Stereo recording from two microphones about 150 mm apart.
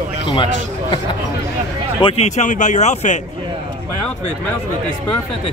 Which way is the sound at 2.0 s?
35° left (ahead or behind).